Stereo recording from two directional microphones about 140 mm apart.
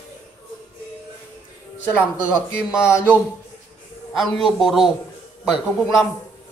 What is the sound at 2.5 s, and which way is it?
Speech, 20° left (ahead or behind).